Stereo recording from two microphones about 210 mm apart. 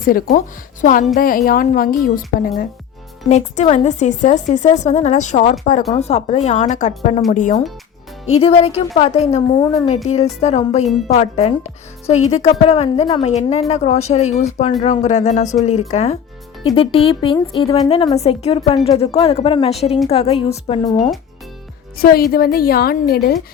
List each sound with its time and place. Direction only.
0.0 s a woman's voice: 40° left (ahead or behind)
3.2 s speech: 35° left (ahead or behind)
21.9 s a woman's voice: 45° left (ahead or behind)